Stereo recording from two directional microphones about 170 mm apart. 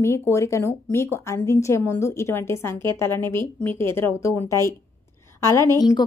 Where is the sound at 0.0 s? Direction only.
15° left (ahead or behind).